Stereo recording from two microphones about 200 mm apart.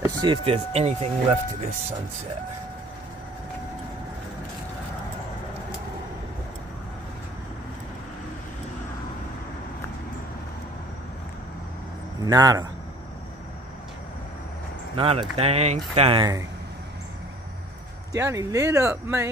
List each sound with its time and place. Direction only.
0.0 s speech: 20° right (ahead or behind)
12.2 s speech: 20° right (ahead or behind)
15.0 s speech: 30° right (ahead or behind)
18.1 s speech: 15° right (ahead or behind)